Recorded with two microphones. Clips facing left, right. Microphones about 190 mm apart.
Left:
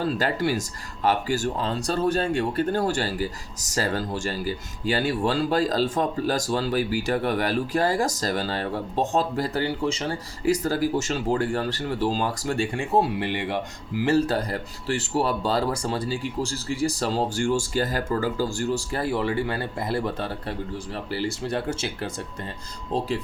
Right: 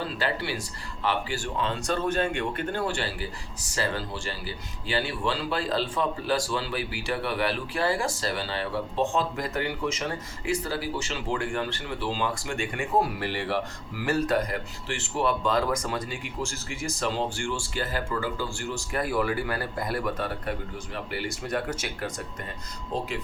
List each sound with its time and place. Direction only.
0.0 s speech: 45° left (ahead or behind)